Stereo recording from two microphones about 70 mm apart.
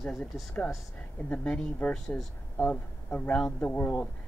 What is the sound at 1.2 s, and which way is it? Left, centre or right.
Speech, centre.